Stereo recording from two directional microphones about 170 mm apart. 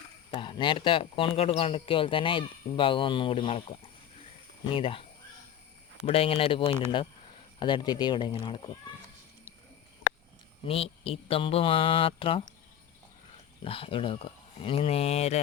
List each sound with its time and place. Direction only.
0.3 s speech: 30° left (ahead or behind)
6.1 s speech: 35° left (ahead or behind)
10.6 s speech: 35° left (ahead or behind)
13.7 s speech: 30° left (ahead or behind)